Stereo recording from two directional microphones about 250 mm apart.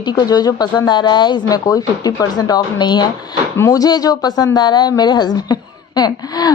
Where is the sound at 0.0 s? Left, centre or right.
Centre.